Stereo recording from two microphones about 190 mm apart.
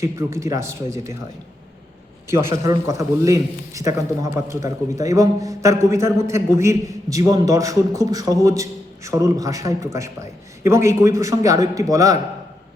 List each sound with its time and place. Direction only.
0.0 s a man's voice: 15° right (ahead or behind)
2.3 s a man's voice: 15° right (ahead or behind)